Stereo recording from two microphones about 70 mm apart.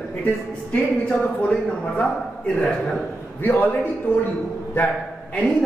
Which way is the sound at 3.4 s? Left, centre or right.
Left.